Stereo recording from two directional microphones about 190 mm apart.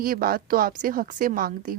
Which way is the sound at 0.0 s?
50° right (ahead or behind).